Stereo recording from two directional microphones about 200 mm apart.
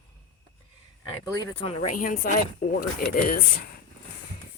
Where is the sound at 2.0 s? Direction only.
45° left (ahead or behind).